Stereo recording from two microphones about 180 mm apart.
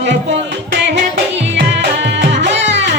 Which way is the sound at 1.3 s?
80° right.